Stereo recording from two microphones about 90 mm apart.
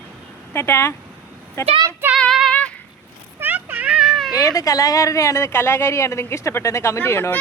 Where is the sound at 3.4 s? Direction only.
20° right (ahead or behind); by 4.3 s centre (ahead or behind).